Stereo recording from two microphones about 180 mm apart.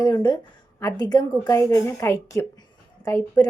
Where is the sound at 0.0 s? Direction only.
25° left (ahead or behind).